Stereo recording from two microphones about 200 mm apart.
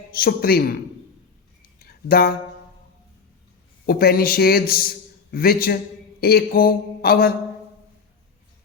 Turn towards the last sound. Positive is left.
turn(degrees=50)  # may be behind; listen again after turning